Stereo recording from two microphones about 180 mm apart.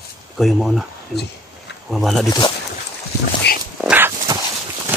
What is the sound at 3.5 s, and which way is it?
Dog, 65° left (ahead or behind).